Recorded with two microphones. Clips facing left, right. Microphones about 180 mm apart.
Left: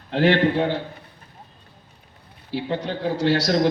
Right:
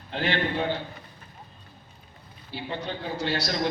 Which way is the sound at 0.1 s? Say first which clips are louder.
Left 10 dB; 85° left.